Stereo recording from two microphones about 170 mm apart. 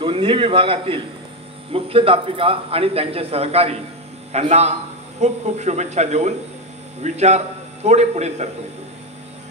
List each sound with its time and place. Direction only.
0.0 s a man's voice: 30° right (ahead or behind)